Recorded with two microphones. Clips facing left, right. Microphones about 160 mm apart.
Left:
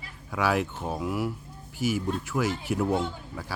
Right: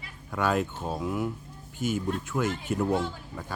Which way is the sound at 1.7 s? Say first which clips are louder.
Left 1 dB; 80° left.